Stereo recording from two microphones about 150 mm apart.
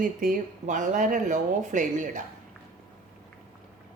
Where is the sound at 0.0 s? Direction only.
65° right (ahead or behind).